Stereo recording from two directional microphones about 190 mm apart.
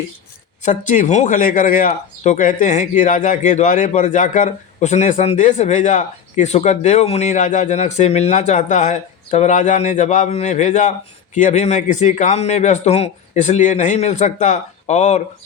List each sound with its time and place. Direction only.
0.6 s speech: 40° left (ahead or behind)